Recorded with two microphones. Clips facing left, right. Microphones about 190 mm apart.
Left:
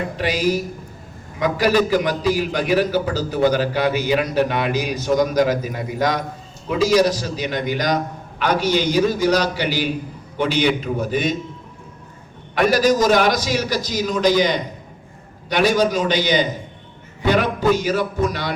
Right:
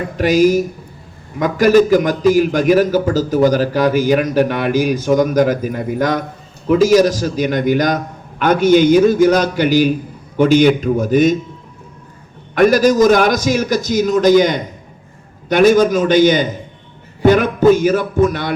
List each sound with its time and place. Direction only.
0.2 s a man's voice: 45° right (ahead or behind)
12.5 s a man's voice: 45° right (ahead or behind)